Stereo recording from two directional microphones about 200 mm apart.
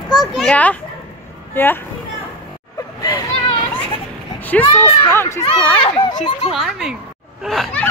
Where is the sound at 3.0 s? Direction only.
20° left (ahead or behind).